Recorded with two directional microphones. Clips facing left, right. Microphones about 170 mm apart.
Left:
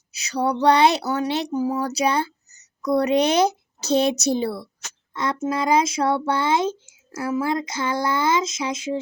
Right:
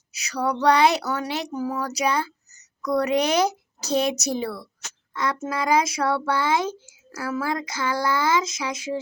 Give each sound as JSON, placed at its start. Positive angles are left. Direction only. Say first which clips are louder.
{"t": 0.1, "sound": "speech", "louder": "left 3 dB", "side_deg": 25}